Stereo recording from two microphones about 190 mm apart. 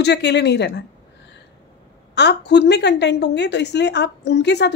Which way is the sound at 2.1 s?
65° left (ahead or behind).